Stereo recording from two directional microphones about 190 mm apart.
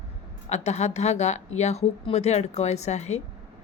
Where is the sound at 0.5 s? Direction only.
35° left (ahead or behind).